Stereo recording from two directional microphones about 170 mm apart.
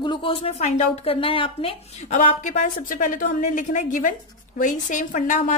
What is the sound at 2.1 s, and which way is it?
A woman's voice, 50° left (ahead or behind).